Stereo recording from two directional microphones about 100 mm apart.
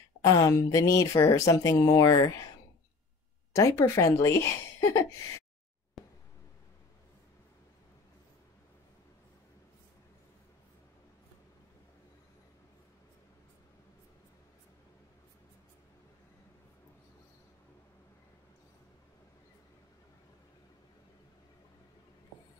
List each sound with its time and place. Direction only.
0.2 s speech: 35° left (ahead or behind)
3.5 s speech: 30° left (ahead or behind)
6.0 s a sound: centre (ahead or behind)